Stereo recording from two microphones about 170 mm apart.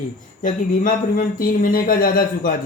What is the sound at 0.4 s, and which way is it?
A woman's voice, 50° left (ahead or behind).